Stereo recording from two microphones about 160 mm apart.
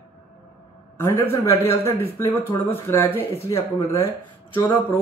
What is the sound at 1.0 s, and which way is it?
Speech, 15° left (ahead or behind).